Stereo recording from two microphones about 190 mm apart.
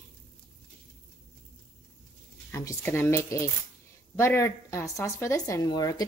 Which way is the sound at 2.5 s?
15° left (ahead or behind).